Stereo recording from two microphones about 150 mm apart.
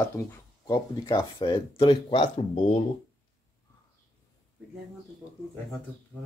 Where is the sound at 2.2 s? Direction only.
50° left (ahead or behind).